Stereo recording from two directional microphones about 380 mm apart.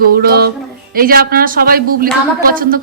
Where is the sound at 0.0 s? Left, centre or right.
Right.